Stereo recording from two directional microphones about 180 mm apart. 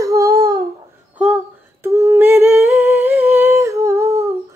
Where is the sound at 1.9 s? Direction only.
15° right (ahead or behind).